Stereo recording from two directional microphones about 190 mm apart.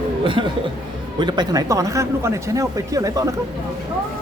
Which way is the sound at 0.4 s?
30° right (ahead or behind).